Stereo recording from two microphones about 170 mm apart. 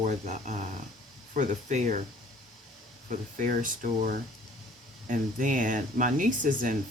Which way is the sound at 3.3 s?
50° right (ahead or behind).